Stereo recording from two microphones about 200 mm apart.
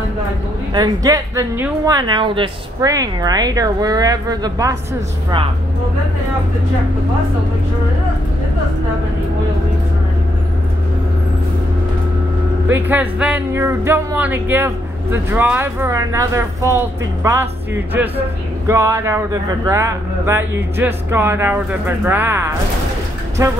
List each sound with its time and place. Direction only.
0.7 s a woman's voice: 15° right (ahead or behind)
12.6 s speech: 10° right (ahead or behind)